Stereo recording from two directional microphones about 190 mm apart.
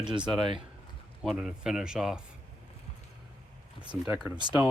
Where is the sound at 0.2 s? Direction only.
5° right (ahead or behind).